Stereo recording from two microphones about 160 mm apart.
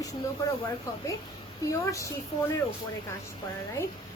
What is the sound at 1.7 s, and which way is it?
Speech, 20° left (ahead or behind).